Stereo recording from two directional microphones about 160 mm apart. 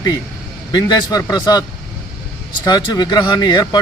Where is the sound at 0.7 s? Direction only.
25° left (ahead or behind).